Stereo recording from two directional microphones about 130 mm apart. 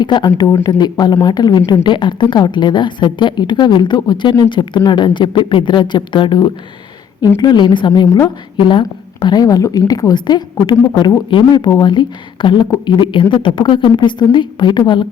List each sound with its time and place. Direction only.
0.0 s speech: 35° left (ahead or behind)